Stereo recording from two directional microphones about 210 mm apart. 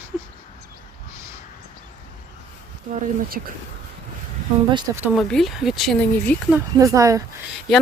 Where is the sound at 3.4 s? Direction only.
40° right (ahead or behind).